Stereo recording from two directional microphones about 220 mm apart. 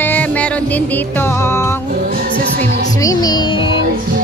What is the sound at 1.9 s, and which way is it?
Music, 40° right (ahead or behind).